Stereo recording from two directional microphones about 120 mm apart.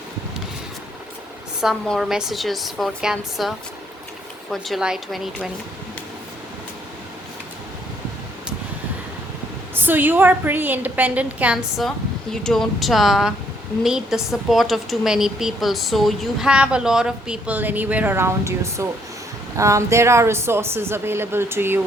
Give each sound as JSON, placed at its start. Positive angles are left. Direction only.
{"t": 1.9, "sound": "a woman's voice", "side_deg": -5}
{"t": 4.5, "sound": "a woman's voice", "side_deg": 0}
{"t": 9.7, "sound": "a woman's voice", "side_deg": -15}
{"t": 11.8, "sound": "a woman's voice", "side_deg": 5}